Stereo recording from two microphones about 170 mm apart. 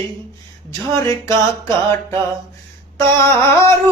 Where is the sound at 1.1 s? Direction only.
15° left (ahead or behind).